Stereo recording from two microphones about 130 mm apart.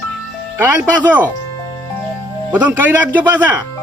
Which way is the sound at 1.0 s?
15° right (ahead or behind).